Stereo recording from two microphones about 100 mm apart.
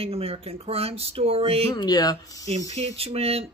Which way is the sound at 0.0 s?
80° right.